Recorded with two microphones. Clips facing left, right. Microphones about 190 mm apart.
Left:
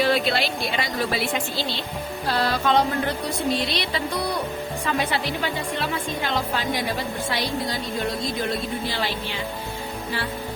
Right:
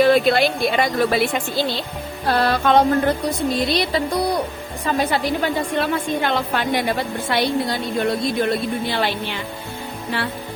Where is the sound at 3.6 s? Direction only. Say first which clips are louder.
Right 6 dB; 45° right (ahead or behind); by 7.7 s 60° right (ahead or behind).